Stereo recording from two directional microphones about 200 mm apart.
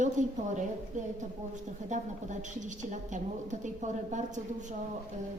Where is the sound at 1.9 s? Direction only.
35° right (ahead or behind).